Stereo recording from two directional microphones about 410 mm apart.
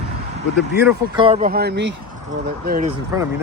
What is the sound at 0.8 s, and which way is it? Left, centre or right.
Speech, centre.